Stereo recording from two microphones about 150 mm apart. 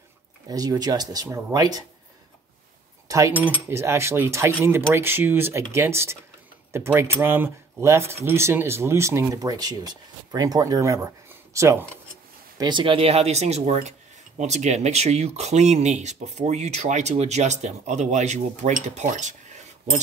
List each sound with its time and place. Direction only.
0.5 s speech: 25° right (ahead or behind)
3.1 s speech: 20° right (ahead or behind)
12.5 s speech: 30° right (ahead or behind); by 20.0 s 50° right (ahead or behind)